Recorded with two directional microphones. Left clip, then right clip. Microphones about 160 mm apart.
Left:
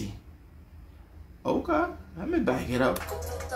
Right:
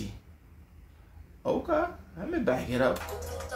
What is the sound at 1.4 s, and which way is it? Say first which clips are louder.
Speech: left 1 dB; centre (ahead or behind).